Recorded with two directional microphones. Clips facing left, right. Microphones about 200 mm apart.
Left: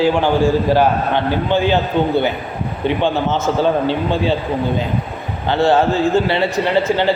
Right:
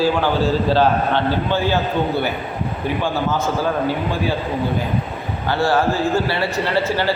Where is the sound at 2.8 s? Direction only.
25° left (ahead or behind).